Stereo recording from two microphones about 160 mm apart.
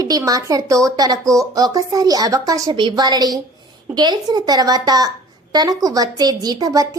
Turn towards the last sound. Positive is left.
turn(degrees=-25)  # may be behind; listen again after turning